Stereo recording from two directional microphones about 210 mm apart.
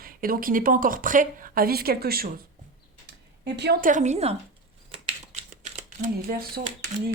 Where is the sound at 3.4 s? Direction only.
50° right (ahead or behind).